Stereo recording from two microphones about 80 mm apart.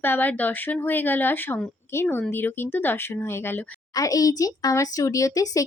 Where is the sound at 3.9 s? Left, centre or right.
Left.